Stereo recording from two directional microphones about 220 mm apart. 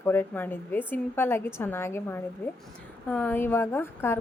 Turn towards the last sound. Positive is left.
turn(degrees=10)  # may be behind; listen again after turning